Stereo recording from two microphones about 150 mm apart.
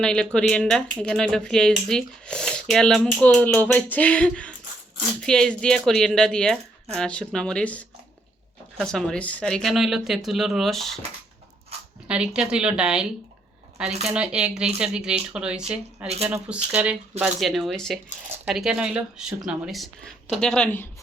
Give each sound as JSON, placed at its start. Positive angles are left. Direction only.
{"t": 0.0, "sound": "speech", "side_deg": 5}
{"t": 12.0, "sound": "speech", "side_deg": -5}
{"t": 16.0, "sound": "speech", "side_deg": -45}
{"t": 16.7, "sound": "speech", "side_deg": -10}